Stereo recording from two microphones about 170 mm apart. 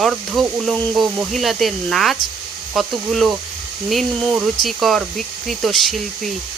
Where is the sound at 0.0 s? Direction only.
Centre (ahead or behind).